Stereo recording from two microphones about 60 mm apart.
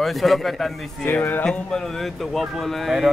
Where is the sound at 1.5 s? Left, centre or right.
Centre.